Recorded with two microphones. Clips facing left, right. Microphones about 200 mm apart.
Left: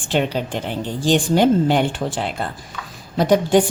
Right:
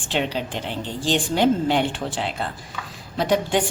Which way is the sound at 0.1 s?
45° left (ahead or behind).